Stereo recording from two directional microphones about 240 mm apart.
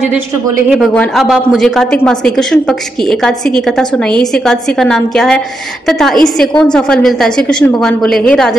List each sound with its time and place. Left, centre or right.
0.7 s a woman's voice: centre